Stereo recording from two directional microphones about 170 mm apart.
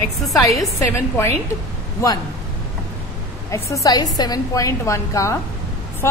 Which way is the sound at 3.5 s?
20° left (ahead or behind).